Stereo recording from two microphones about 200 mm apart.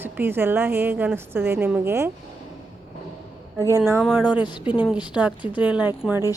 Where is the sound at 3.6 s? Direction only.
15° right (ahead or behind).